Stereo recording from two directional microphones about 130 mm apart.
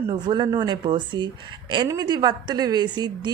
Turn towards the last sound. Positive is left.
turn(degrees=-35)  # may be behind; listen again after turning